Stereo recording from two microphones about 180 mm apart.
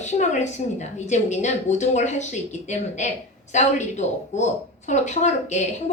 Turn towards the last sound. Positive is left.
turn(degrees=40)  # may be behind; listen again after turning